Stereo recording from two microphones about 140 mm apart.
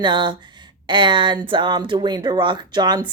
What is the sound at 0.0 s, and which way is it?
Speech, 35° right (ahead or behind).